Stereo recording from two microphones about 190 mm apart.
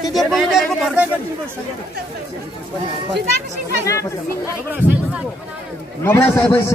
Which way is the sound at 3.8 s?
15° left (ahead or behind).